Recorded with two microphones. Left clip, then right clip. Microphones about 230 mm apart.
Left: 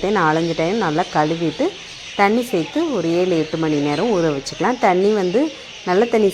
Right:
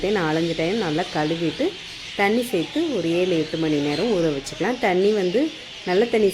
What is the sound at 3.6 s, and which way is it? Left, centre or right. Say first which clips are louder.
Speech: left 3 dB; centre.